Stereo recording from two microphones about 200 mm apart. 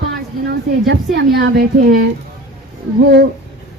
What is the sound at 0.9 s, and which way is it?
Speech, 55° right (ahead or behind).